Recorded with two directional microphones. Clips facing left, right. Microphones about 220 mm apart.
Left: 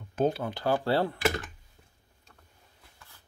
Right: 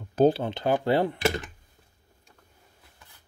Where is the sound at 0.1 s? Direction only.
35° right (ahead or behind).